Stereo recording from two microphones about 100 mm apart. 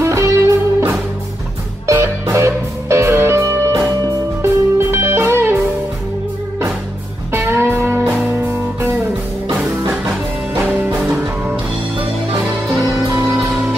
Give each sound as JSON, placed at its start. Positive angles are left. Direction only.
{"t": 0.0, "sound": "music", "side_deg": -30}
{"t": 1.9, "sound": "music", "side_deg": -25}
{"t": 7.3, "sound": "music", "side_deg": -25}
{"t": 10.5, "sound": "music", "side_deg": -20}